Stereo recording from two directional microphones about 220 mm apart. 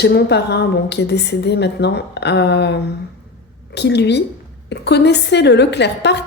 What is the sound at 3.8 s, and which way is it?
A woman's voice, 50° left (ahead or behind).